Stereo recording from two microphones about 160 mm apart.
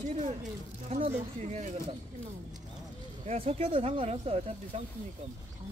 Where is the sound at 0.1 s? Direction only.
40° right (ahead or behind).